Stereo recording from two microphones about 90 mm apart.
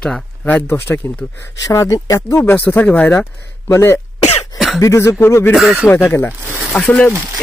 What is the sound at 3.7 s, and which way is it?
Speech, 30° left (ahead or behind).